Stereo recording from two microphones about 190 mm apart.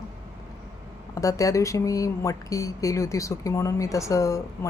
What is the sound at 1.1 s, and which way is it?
Speech, 15° left (ahead or behind).